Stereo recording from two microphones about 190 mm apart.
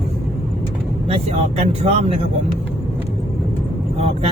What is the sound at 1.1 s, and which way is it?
Speech, 35° right (ahead or behind).